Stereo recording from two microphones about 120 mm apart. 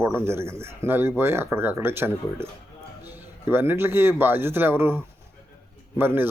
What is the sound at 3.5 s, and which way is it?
Speech, 20° right (ahead or behind).